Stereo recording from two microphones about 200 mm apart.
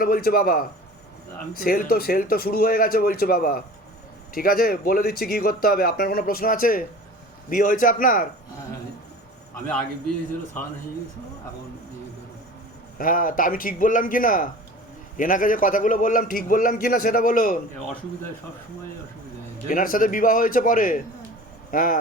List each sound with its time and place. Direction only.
0.0 s speech: 50° left (ahead or behind)
13.0 s speech: 45° left (ahead or behind)
19.6 s speech: 45° left (ahead or behind)